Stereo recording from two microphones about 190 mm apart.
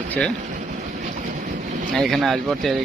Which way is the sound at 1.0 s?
45° right (ahead or behind).